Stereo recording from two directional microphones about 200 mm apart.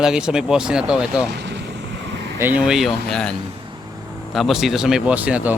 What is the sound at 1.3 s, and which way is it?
Speech, 60° right (ahead or behind).